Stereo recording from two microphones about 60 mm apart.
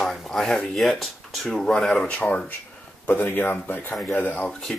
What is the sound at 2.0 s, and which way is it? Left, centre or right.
Speech, left.